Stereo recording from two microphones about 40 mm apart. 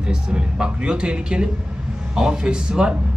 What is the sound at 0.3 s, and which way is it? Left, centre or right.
A man's voice, right.